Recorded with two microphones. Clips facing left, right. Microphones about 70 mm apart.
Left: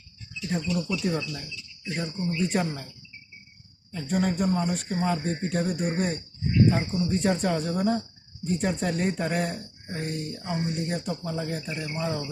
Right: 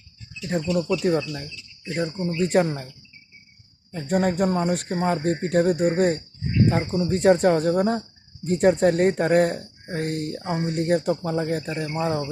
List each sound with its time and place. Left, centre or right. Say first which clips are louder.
0.8 s speech: right 6 dB; right
3.9 s speech: right 4 dB; right
7.1 s speech: right 9 dB; right